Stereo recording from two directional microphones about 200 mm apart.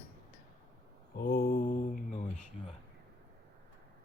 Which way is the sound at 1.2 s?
50° left (ahead or behind).